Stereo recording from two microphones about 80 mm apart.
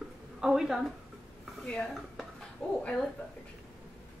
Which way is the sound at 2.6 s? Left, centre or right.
Centre.